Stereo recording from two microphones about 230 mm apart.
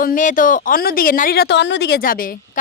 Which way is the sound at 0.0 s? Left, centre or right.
Left.